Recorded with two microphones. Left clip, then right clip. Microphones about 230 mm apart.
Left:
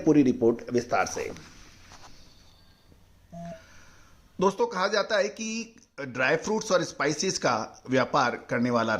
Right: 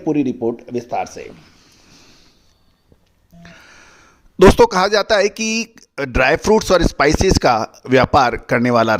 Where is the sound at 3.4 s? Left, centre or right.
Right.